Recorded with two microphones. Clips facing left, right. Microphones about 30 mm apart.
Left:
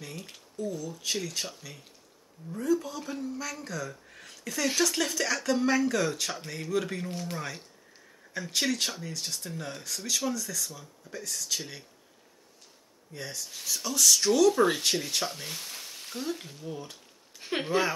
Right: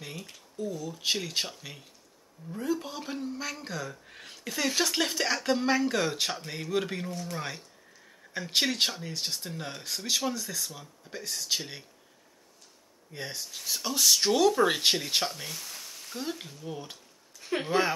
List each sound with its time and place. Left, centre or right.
0.6 s speech: right
7.1 s speech: centre
8.3 s speech: right
13.1 s speech: right
15.8 s frying: left
16.6 s speech: centre
17.4 s a sound: left
17.6 s speech: centre